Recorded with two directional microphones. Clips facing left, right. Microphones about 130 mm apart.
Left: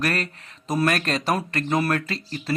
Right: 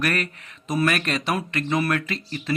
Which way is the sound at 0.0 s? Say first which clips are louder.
Even; 30° left (ahead or behind).